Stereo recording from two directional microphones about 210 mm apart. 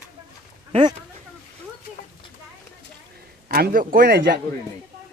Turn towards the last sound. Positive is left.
turn(degrees=-45)  # may be behind; listen again after turning